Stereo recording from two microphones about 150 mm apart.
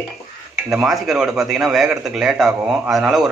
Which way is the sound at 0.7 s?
5° right (ahead or behind).